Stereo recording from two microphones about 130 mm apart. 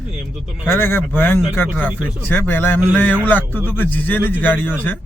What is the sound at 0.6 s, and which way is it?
A man's voice, 20° left (ahead or behind).